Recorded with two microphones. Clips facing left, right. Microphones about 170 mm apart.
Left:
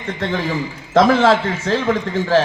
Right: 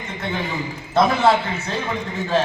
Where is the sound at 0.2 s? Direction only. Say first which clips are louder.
Left 4 dB; 90° left.